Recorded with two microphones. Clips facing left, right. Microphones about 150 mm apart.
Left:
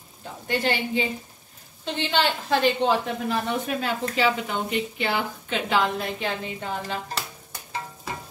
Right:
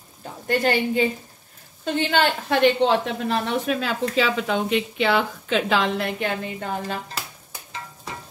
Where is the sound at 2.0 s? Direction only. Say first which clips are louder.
Right 3 dB; 50° right (ahead or behind).